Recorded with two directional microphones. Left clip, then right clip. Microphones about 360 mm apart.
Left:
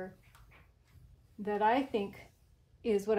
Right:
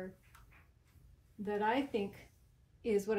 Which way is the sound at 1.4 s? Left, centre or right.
Centre.